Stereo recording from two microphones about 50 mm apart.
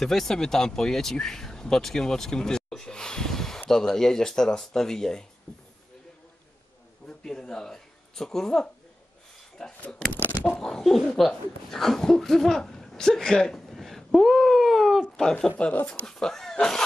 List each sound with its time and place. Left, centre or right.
0.0 s speech: centre
7.1 s speech: centre
10.1 s a sound: left
10.5 s speech: centre
15.5 s speech: left
16.1 s speech: centre